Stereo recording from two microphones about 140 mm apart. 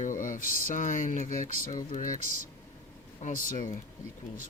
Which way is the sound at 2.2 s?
60° right (ahead or behind).